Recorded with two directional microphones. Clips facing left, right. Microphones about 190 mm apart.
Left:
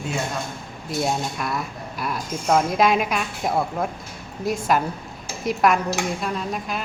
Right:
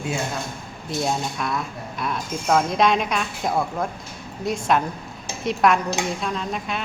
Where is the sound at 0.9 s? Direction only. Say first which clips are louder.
Even; centre (ahead or behind).